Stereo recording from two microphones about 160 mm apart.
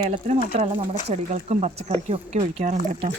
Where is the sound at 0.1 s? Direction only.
45° right (ahead or behind).